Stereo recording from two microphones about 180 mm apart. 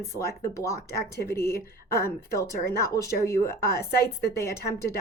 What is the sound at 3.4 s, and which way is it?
Speech, 60° left (ahead or behind).